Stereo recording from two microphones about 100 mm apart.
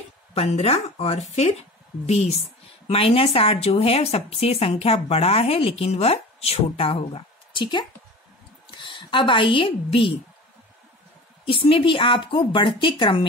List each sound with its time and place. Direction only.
0.3 s speech: 90° left
2.9 s a woman's voice: 75° left (ahead or behind)
8.6 s a woman's voice: 55° left (ahead or behind)
11.4 s speech: 70° left (ahead or behind)